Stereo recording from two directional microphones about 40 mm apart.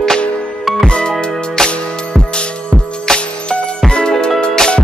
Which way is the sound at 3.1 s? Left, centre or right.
Centre.